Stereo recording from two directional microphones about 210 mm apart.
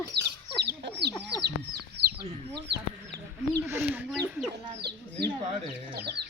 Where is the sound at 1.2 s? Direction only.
50° right (ahead or behind).